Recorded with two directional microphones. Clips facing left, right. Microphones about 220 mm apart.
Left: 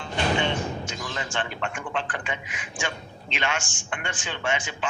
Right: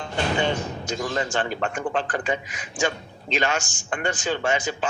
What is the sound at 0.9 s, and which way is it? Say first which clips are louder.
A man's voice: right 7 dB; 40° right (ahead or behind).